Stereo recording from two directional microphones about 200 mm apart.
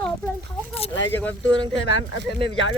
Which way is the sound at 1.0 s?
65° left (ahead or behind).